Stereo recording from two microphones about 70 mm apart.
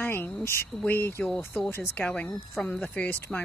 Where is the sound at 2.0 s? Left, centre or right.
Centre.